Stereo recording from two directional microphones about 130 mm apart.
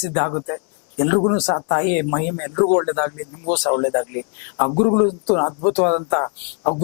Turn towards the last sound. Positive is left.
turn(degrees=15)  # may be behind; listen again after turning